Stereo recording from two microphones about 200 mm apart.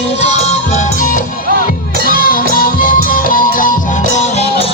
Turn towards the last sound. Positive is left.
turn(degrees=35)  # may be behind; listen again after turning